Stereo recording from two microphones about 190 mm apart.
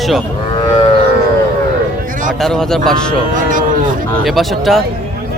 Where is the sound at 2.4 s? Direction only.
Centre (ahead or behind).